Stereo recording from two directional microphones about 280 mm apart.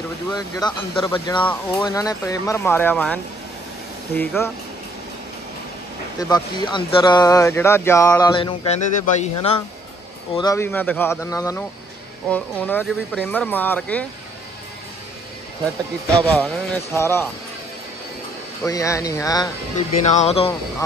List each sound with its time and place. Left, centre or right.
0.3 s speech: centre
4.2 s speech: centre
6.1 s speech: centre
10.3 s speech: centre
16.3 s speech: centre
18.6 s speech: centre